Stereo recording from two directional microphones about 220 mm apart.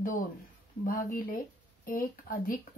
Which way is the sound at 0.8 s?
40° left (ahead or behind).